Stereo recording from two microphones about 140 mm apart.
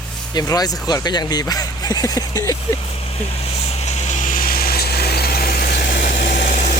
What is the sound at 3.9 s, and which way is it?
Vehicle, 60° left (ahead or behind).